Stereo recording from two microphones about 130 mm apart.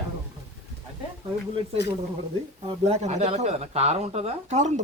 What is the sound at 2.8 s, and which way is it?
Speech, 55° right (ahead or behind).